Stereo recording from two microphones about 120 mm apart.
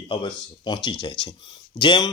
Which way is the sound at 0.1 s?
40° left (ahead or behind).